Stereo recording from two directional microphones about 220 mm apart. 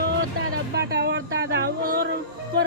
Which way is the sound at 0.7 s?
45° right (ahead or behind).